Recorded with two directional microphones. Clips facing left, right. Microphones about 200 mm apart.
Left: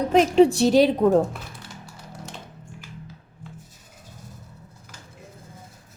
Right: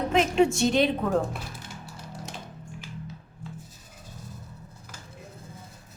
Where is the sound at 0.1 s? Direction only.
35° left (ahead or behind).